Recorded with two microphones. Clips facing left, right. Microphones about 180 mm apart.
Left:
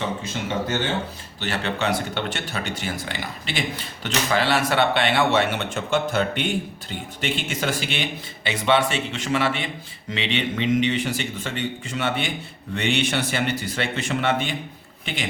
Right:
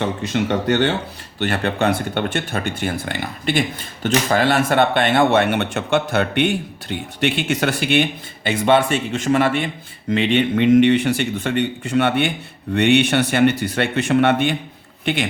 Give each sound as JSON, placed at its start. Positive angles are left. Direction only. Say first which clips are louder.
{"t": 0.0, "sound": "speech", "louder": "right 7 dB", "side_deg": -65}
{"t": 1.4, "sound": "a woman's voice", "louder": "right 6 dB", "side_deg": -55}